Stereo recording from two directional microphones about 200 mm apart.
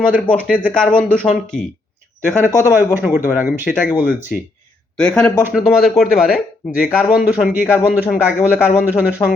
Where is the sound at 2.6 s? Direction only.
10° right (ahead or behind).